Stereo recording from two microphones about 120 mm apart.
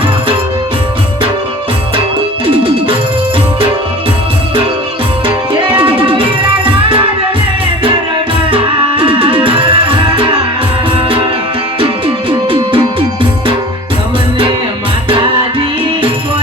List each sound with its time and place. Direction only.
2.6 s music: 45° right (ahead or behind)
5.5 s music: 45° right (ahead or behind)
8.4 s music: 45° right (ahead or behind)
11.8 s music: 45° right (ahead or behind)